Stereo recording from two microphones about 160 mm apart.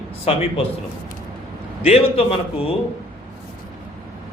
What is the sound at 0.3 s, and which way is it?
Speech, 40° left (ahead or behind).